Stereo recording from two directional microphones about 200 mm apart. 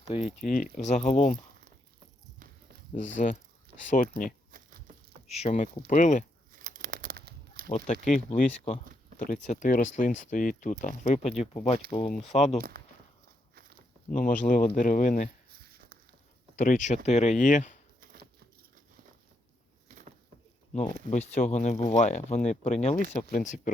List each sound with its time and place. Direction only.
0.1 s speech: 30° left (ahead or behind)
3.8 s speech: 40° left (ahead or behind)
4.5 s a sound: 50° right (ahead or behind)
5.3 s speech: 35° left (ahead or behind)
6.6 s crumpling: 40° right (ahead or behind)
7.9 s speech: 35° left (ahead or behind)
12.7 s a sound: 50° right (ahead or behind)
14.1 s speech: 40° left (ahead or behind)
16.6 s speech: 40° left (ahead or behind)
19.9 s a sound: 40° right (ahead or behind)
21.1 s speech: 35° left (ahead or behind)